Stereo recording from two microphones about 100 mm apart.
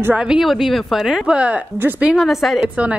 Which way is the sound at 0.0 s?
10° right (ahead or behind).